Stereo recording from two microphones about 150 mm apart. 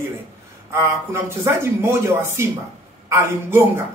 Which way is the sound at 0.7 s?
20° right (ahead or behind).